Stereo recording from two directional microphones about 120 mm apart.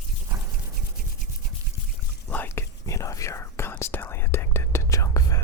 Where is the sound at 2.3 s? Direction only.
15° left (ahead or behind).